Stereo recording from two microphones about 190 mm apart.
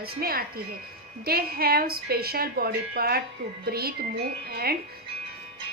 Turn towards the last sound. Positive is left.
turn(degrees=-55)  # may be behind; listen again after turning